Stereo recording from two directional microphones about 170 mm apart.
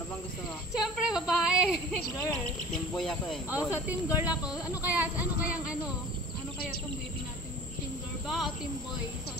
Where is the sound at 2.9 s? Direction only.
5° left (ahead or behind).